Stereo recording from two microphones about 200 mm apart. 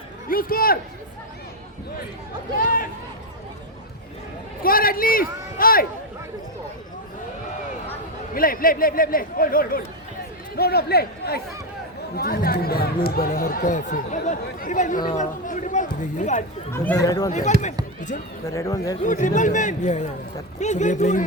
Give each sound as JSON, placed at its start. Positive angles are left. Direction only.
{"t": 0.3, "sound": "speech", "side_deg": 45}
{"t": 2.6, "sound": "speech", "side_deg": 45}
{"t": 4.6, "sound": "speech", "side_deg": 45}
{"t": 8.3, "sound": "speech", "side_deg": 45}
{"t": 16.7, "sound": "a man's voice", "side_deg": 10}
{"t": 18.5, "sound": "a man's voice", "side_deg": 15}
{"t": 19.0, "sound": "speech", "side_deg": 40}